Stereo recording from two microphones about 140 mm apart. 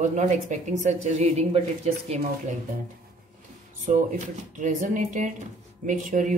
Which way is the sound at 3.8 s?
65° right (ahead or behind).